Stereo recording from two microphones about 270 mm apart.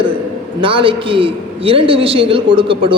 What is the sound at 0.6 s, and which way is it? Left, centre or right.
A man's voice, centre.